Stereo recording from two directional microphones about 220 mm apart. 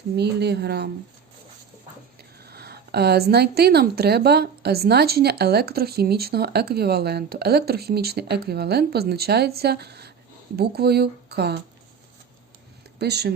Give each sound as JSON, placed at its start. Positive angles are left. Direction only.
{"t": 0.2, "sound": "speech", "side_deg": -50}
{"t": 2.4, "sound": "speech", "side_deg": -45}
{"t": 13.0, "sound": "speech", "side_deg": -50}